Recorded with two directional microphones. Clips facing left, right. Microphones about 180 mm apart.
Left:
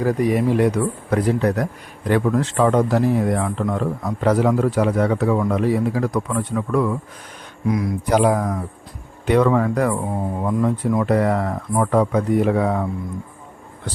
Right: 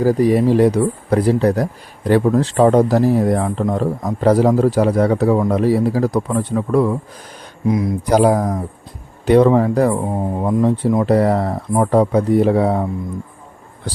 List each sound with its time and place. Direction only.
0.0 s speech: 35° right (ahead or behind)
8.1 s speech: 35° right (ahead or behind)